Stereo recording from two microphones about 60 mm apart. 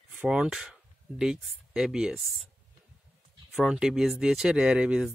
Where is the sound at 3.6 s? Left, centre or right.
Centre.